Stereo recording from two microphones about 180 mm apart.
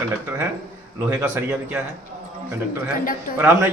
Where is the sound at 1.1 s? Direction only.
15° right (ahead or behind).